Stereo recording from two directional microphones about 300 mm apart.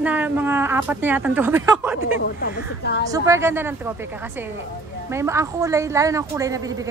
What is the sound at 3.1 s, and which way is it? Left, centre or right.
Speech, centre.